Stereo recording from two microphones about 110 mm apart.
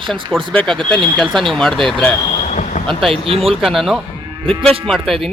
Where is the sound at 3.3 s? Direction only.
60° right (ahead or behind).